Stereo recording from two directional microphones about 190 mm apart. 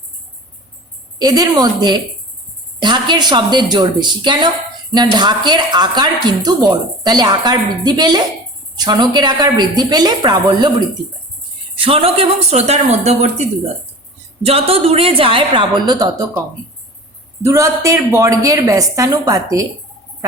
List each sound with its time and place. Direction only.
1.2 s a woman's voice: 20° right (ahead or behind)
17.4 s a woman's voice: 15° right (ahead or behind)